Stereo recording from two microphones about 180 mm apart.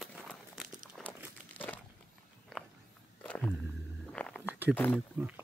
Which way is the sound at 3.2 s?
5° left (ahead or behind).